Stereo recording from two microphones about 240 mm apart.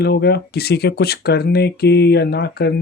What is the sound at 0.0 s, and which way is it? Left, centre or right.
Speech, left.